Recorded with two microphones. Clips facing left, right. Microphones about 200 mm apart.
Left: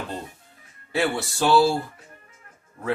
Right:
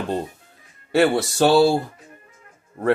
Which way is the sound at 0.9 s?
80° right.